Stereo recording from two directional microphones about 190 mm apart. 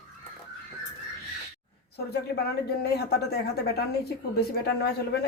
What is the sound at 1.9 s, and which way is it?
Speech, 55° left (ahead or behind).